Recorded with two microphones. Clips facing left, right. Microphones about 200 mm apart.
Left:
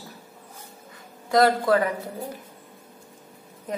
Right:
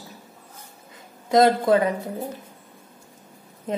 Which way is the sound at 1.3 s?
20° right (ahead or behind).